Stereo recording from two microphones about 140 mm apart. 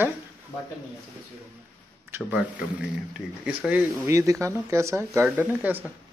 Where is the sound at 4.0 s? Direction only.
20° right (ahead or behind).